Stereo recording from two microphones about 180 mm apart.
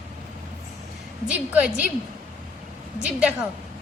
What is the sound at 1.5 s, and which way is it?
Speech, 5° right (ahead or behind).